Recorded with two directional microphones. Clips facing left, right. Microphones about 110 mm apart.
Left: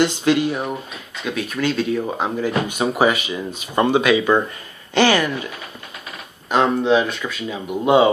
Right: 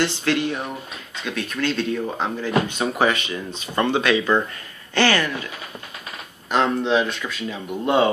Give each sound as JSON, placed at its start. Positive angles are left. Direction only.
{"t": 0.0, "sound": "speech", "side_deg": 15}
{"t": 6.5, "sound": "speech", "side_deg": 5}